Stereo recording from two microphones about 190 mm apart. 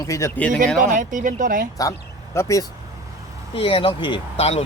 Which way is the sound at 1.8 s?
15° left (ahead or behind).